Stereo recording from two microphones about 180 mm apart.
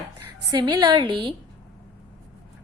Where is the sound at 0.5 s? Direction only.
20° right (ahead or behind).